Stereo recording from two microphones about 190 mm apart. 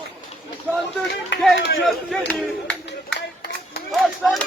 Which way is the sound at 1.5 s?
65° left (ahead or behind).